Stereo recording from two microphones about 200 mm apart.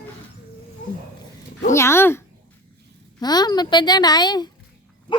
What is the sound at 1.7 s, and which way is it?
A woman's voice, 15° left (ahead or behind).